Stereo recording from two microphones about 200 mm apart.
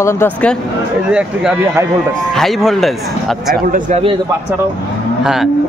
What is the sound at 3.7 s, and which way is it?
Speech, 40° right (ahead or behind).